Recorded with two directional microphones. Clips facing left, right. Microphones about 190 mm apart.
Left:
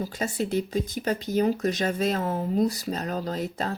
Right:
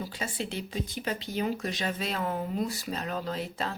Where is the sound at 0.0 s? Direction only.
45° left (ahead or behind).